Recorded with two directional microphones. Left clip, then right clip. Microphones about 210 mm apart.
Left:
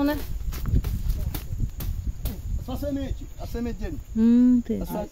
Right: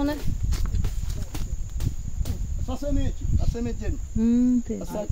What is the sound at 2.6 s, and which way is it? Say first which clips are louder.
Speech: even; 20° left (ahead or behind).